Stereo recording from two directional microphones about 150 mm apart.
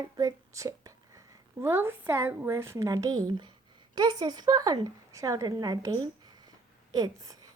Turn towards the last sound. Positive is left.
turn(degrees=-25)  # may be behind; listen again after turning